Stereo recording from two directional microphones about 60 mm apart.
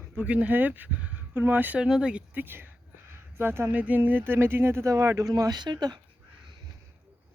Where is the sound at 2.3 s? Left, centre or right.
Right.